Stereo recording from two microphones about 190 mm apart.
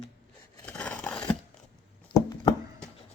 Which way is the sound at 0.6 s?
5° left (ahead or behind).